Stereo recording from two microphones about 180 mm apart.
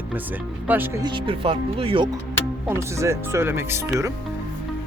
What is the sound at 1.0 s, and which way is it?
Speech, 30° right (ahead or behind).